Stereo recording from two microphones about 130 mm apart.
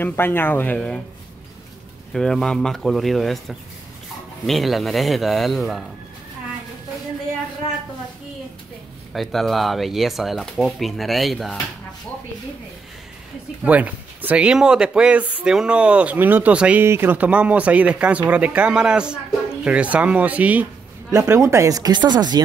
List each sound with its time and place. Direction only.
0.0 s speech: 15° left (ahead or behind)
2.1 s speech: 5° left (ahead or behind)
9.1 s speech: centre (ahead or behind)
13.7 s speech: 10° right (ahead or behind)
21.1 s speech: 25° right (ahead or behind)